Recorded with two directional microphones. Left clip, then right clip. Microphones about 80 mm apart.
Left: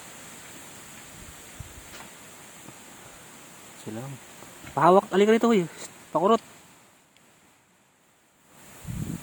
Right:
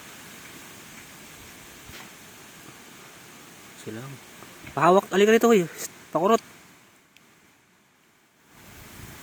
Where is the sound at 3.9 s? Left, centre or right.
Left.